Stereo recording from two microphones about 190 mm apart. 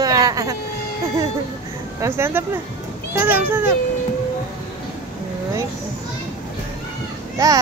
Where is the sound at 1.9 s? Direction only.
15° right (ahead or behind).